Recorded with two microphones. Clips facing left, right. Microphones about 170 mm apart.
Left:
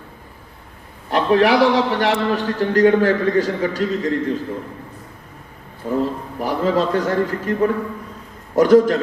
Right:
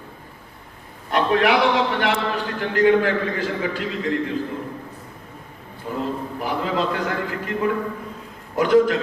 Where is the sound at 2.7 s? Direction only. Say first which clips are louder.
Left 2 dB; 40° left (ahead or behind).